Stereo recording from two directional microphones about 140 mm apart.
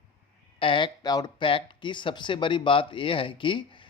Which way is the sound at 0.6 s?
35° left (ahead or behind).